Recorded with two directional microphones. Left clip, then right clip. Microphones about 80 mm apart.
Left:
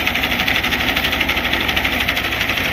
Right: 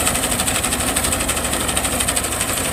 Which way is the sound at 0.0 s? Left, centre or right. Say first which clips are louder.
Left 3 dB; right.